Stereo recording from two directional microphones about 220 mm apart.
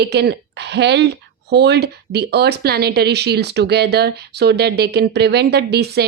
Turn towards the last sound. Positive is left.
turn(degrees=-50)  # may be behind; listen again after turning